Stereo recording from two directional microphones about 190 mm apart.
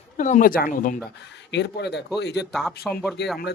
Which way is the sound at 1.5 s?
65° left (ahead or behind).